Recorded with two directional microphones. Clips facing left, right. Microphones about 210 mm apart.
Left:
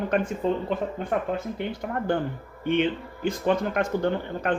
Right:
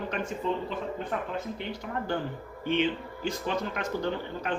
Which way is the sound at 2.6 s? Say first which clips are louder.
Left 4 dB; 55° left (ahead or behind).